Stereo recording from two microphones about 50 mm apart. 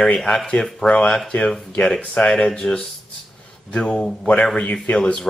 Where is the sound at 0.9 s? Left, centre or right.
Left.